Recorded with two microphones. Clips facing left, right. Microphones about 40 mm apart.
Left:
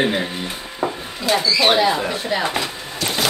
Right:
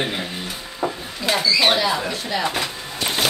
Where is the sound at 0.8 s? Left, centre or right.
Left.